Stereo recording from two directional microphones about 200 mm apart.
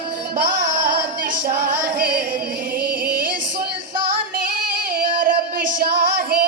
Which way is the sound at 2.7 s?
50° right (ahead or behind).